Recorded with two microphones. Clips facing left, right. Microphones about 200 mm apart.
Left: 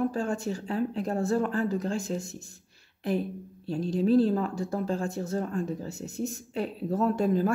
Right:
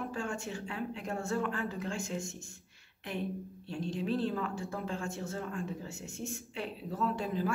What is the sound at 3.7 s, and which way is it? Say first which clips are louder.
A woman's voice: left 10 dB; 40° left (ahead or behind).